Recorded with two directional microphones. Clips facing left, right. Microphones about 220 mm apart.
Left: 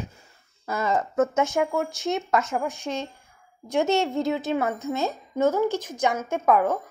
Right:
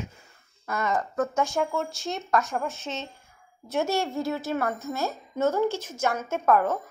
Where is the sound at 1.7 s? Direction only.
5° left (ahead or behind).